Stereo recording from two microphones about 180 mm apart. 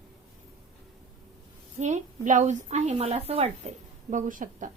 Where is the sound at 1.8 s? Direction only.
40° right (ahead or behind).